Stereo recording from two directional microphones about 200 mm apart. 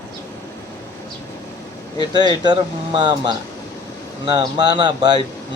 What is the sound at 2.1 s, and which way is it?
Speech, 20° right (ahead or behind).